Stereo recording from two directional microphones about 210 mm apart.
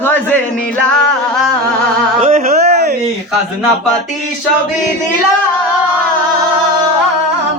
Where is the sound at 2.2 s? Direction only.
30° right (ahead or behind).